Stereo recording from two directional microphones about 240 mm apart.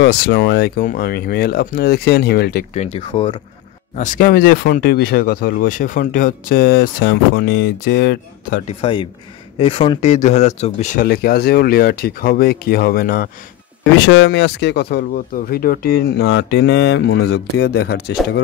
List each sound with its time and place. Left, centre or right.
0.0 s speech: left
2.7 s speech: left
8.6 s speech: left